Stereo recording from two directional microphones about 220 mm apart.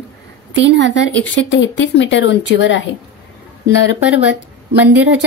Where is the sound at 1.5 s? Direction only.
55° left (ahead or behind).